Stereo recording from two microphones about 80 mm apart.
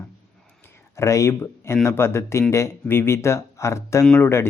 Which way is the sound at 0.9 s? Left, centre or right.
Left.